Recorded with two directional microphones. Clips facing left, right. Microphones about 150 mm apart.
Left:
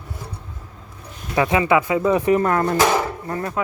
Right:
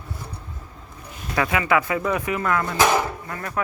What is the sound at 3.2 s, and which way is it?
Speech, 30° left (ahead or behind).